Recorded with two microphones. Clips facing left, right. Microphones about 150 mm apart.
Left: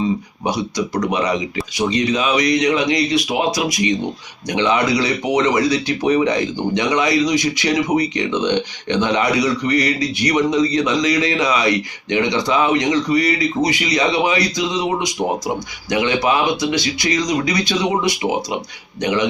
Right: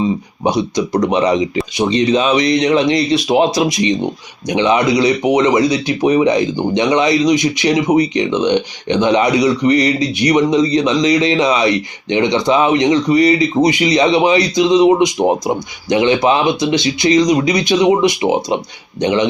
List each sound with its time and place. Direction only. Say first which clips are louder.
0.4 s speech: right 5 dB; 25° right (ahead or behind)